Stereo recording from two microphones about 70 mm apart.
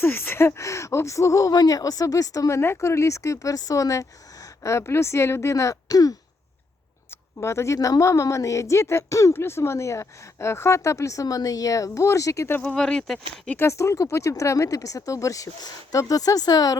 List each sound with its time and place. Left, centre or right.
0.0 s speech: left
0.6 s a woman's voice: left
7.3 s a woman's voice: left
9.3 s a woman's voice: left
12.6 s speech: centre
13.6 s a woman's voice: left